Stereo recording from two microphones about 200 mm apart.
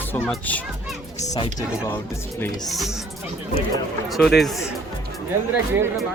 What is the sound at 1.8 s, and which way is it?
Speech, 10° left (ahead or behind).